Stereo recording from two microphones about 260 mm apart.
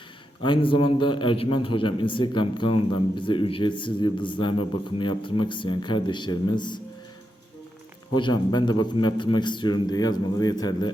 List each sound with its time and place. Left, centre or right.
0.4 s a man's voice: centre
8.1 s a man's voice: centre